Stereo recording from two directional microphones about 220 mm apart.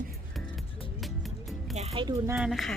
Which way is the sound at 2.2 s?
5° right (ahead or behind).